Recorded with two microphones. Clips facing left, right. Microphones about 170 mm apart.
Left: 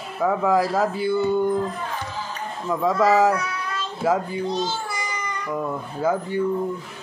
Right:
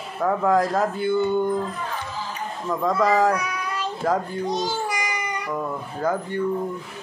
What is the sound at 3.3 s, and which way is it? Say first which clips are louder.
Child singing: even; 15° right (ahead or behind).